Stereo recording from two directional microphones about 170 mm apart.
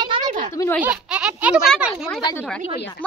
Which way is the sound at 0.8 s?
5° right (ahead or behind).